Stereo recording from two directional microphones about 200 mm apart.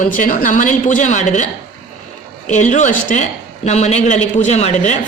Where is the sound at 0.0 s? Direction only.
40° left (ahead or behind).